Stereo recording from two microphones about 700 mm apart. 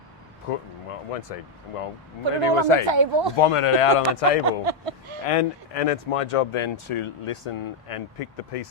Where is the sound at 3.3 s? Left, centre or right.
Left.